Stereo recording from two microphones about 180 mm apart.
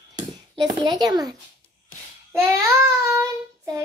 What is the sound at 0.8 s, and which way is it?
Speech, 20° right (ahead or behind).